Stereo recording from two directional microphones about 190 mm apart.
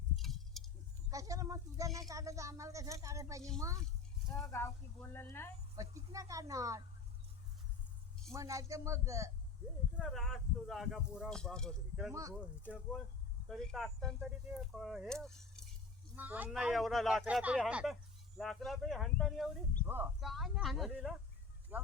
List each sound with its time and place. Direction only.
0.2 s a sound: centre (ahead or behind)
1.1 s speech: 15° right (ahead or behind)
4.5 s speech: 10° left (ahead or behind)
5.7 s speech: 15° right (ahead or behind)
8.3 s speech: 15° right (ahead or behind)
10.0 s speech: centre (ahead or behind)
16.1 s speech: 10° right (ahead or behind)
19.8 s speech: 10° right (ahead or behind)
20.2 s speech: centre (ahead or behind)